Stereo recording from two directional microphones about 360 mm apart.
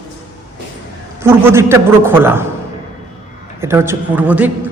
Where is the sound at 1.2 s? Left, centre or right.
Centre.